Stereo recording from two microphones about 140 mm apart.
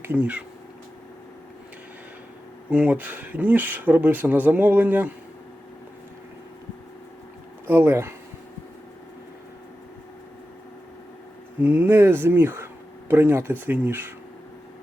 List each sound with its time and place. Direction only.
0.0 s speech: 10° right (ahead or behind)
2.6 s speech: 10° right (ahead or behind)
7.7 s speech: 15° right (ahead or behind)
11.6 s speech: 15° right (ahead or behind)